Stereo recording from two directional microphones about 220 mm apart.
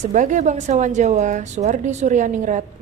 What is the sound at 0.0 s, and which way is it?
Speech, 35° right (ahead or behind).